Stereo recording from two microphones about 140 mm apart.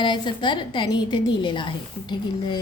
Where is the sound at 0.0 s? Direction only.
35° left (ahead or behind).